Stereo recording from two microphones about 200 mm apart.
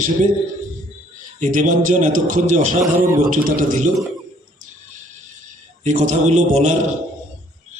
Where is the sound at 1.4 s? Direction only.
40° right (ahead or behind).